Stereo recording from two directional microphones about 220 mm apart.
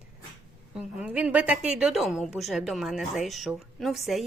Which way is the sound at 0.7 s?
5° right (ahead or behind).